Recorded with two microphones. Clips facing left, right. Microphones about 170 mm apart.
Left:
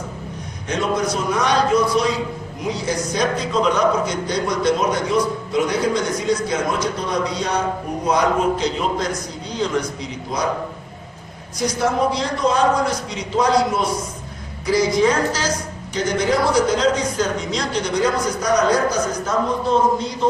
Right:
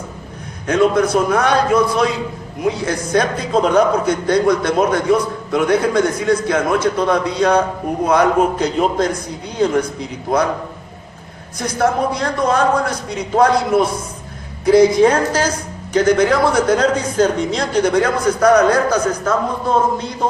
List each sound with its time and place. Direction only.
0.7 s a man's voice: 55° right (ahead or behind)
10.3 s a man's voice: 55° right (ahead or behind)
11.6 s a man's voice: 55° right (ahead or behind)